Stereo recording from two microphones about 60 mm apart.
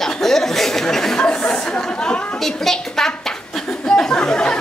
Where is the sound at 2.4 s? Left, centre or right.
Centre.